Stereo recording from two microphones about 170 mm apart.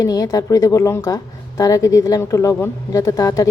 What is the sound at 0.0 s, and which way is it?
A woman's voice, 20° left (ahead or behind).